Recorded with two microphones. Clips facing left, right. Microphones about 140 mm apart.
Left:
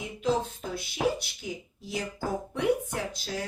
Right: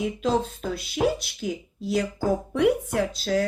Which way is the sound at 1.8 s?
90° right.